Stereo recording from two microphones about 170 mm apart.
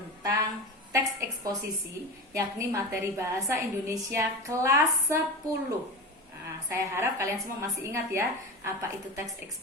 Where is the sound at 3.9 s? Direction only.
20° right (ahead or behind).